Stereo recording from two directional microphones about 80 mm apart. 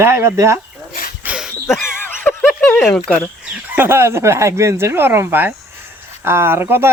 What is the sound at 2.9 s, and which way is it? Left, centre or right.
Speech, centre.